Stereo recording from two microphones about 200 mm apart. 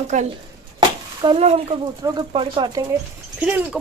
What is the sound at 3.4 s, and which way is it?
Speech, 10° right (ahead or behind).